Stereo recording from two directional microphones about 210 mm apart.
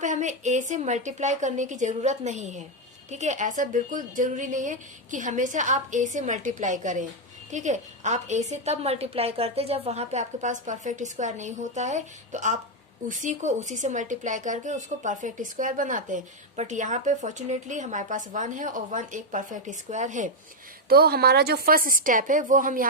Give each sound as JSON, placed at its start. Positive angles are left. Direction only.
{"t": 0.0, "sound": "speech", "side_deg": -35}
{"t": 20.9, "sound": "speech", "side_deg": -50}